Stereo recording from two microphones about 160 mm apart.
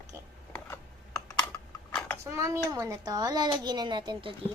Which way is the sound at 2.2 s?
15° right (ahead or behind).